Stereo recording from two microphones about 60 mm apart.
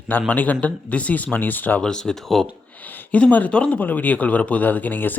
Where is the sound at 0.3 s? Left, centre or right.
Left.